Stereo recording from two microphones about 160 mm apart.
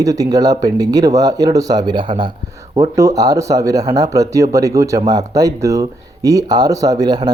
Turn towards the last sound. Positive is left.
turn(degrees=-25)  # may be behind; listen again after turning